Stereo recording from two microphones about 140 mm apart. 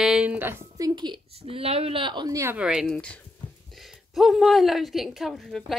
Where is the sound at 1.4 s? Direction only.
45° right (ahead or behind); by 2.6 s 20° right (ahead or behind).